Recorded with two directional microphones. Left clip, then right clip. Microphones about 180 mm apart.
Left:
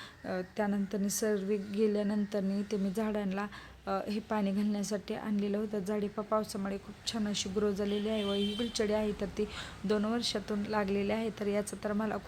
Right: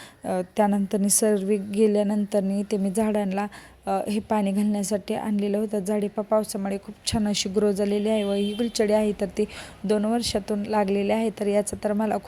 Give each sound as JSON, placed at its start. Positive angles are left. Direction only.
{"t": 0.3, "sound": "a woman's voice", "side_deg": -35}